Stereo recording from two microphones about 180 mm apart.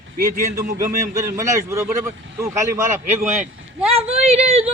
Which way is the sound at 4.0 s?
35° right (ahead or behind).